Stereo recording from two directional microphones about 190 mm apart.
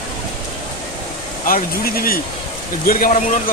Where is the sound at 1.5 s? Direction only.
50° left (ahead or behind).